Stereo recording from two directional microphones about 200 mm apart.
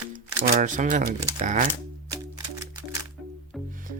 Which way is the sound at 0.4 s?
40° right (ahead or behind).